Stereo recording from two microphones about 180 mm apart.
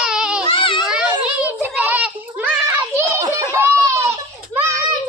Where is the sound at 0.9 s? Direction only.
5° right (ahead or behind).